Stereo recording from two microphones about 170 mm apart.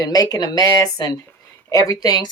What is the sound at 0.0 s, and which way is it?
Speech, 20° left (ahead or behind).